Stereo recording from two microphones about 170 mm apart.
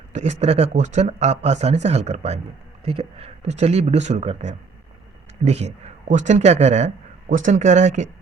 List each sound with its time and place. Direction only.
0.1 s speech: 45° right (ahead or behind)